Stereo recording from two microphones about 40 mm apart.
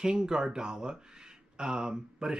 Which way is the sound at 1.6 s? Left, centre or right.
Centre.